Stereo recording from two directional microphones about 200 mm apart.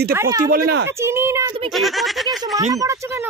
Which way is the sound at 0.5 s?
50° right (ahead or behind).